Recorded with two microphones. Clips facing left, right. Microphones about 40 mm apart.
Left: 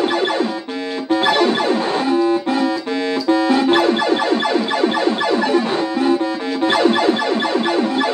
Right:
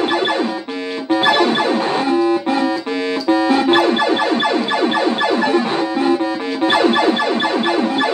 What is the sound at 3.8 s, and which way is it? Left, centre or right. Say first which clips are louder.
Police car: right 1 dB; centre.